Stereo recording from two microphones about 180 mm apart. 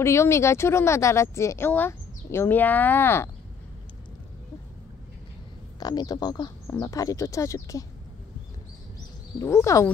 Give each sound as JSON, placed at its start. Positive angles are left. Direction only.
{"t": 0.0, "sound": "speech", "side_deg": 15}
{"t": 5.8, "sound": "speech", "side_deg": 20}
{"t": 9.4, "sound": "speech", "side_deg": 15}